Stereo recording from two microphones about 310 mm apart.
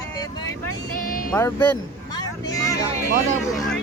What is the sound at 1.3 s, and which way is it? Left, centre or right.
Speech, centre.